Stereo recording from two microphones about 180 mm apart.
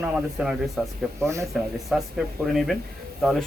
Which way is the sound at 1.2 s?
15° right (ahead or behind).